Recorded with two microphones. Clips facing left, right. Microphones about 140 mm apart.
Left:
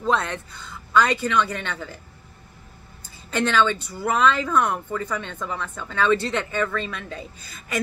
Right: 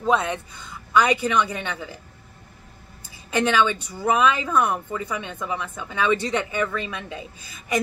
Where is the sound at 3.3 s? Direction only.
15° right (ahead or behind).